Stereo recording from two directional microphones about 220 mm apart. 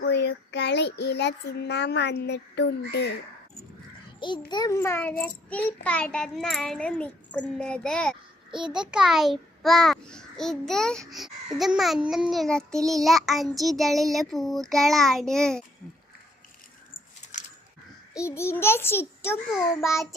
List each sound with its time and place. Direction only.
0.0 s child singing: 50° left (ahead or behind)
4.2 s a child's voice: 20° left (ahead or behind); by 15.6 s 5° left (ahead or behind)
18.1 s a child's voice: 15° left (ahead or behind)